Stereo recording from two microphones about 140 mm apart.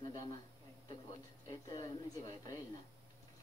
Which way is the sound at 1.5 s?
25° left (ahead or behind).